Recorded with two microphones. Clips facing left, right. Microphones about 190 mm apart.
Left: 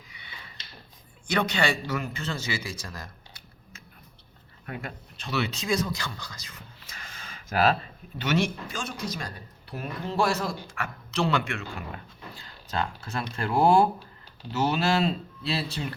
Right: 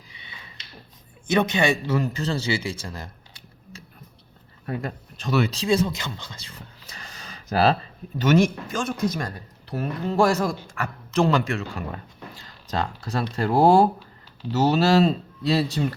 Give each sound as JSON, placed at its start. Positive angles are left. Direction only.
{"t": 0.1, "sound": "a sound", "side_deg": -25}
{"t": 1.3, "sound": "speech", "side_deg": -20}
{"t": 2.0, "sound": "speech", "side_deg": -35}
{"t": 8.2, "sound": "a man's voice", "side_deg": -45}